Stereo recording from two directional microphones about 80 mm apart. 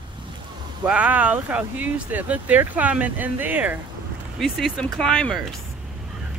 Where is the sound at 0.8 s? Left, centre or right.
Centre.